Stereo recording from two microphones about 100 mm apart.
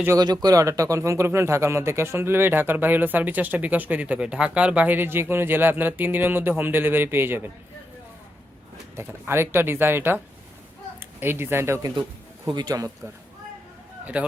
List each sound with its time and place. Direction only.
0.1 s speech: 40° right (ahead or behind); by 7.5 s 20° right (ahead or behind)
9.0 s speech: 25° right (ahead or behind)
11.2 s speech: 25° right (ahead or behind)
12.5 s speech: 40° right (ahead or behind)
14.0 s speech: 15° right (ahead or behind)